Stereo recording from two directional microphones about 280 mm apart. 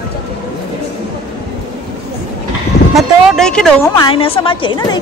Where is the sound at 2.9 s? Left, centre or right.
Centre.